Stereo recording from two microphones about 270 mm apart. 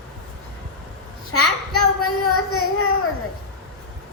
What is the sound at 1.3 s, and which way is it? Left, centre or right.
A child's voice, left.